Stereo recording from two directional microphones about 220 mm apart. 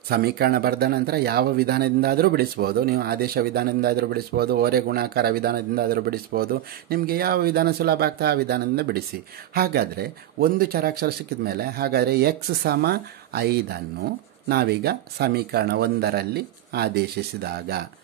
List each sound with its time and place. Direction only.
0.1 s speech: 45° right (ahead or behind)